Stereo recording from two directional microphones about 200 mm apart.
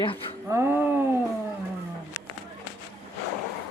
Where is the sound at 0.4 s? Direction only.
15° right (ahead or behind).